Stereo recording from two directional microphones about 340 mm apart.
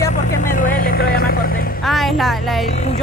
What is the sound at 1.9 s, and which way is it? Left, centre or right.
Speech, centre.